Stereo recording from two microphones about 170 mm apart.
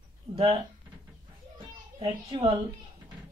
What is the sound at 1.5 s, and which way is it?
Children playing, 35° right (ahead or behind).